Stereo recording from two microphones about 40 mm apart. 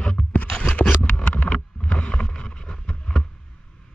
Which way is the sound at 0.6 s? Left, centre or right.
Left.